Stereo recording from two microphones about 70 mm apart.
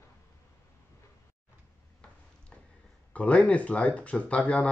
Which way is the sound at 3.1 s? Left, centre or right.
Centre.